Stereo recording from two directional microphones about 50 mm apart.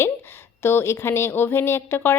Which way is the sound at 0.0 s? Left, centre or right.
Left.